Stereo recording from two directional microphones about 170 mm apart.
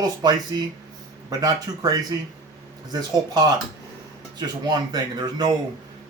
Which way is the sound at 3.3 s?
25° right (ahead or behind).